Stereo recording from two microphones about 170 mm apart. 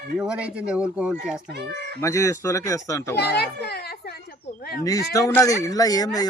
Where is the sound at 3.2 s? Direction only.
70° left (ahead or behind).